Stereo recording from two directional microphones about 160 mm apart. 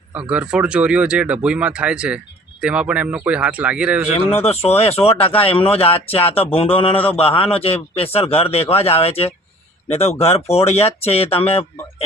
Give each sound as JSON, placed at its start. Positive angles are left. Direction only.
{"t": 0.1, "sound": "speech", "side_deg": -5}
{"t": 4.4, "sound": "speech", "side_deg": 40}